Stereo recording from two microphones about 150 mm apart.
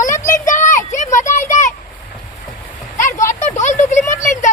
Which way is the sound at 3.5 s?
55° left (ahead or behind).